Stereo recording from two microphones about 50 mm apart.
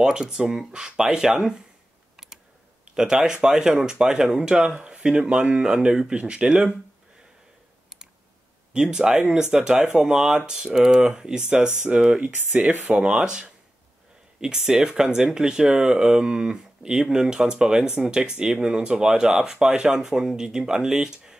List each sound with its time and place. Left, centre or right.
0.0 s speech: centre
2.1 s typing: centre
2.9 s speech: centre
8.7 s speech: centre; by 13.1 s right
13.1 s speech: centre